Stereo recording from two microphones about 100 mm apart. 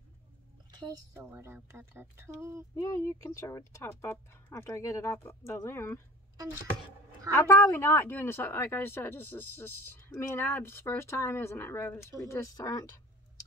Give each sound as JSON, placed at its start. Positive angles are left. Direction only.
{"t": 0.7, "sound": "a sound", "side_deg": -45}
{"t": 1.1, "sound": "speech", "side_deg": -25}
{"t": 2.7, "sound": "a woman's voice", "side_deg": 30}
{"t": 7.3, "sound": "a woman's voice", "side_deg": 25}
{"t": 12.0, "sound": "speech", "side_deg": 30}